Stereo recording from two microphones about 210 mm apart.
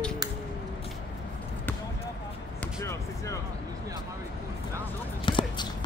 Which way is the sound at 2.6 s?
15° left (ahead or behind).